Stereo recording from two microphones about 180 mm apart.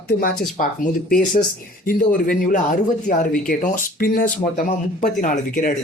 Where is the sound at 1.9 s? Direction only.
50° left (ahead or behind).